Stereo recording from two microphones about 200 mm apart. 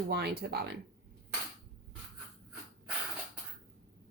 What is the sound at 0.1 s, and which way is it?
Speech, 55° right (ahead or behind).